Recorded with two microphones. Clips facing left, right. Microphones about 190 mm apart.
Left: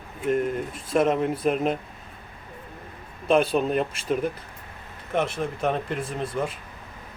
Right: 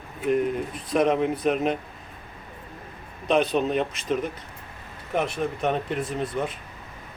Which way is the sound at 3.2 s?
5° left (ahead or behind).